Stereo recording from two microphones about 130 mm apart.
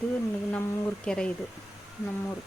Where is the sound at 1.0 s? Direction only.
5° left (ahead or behind).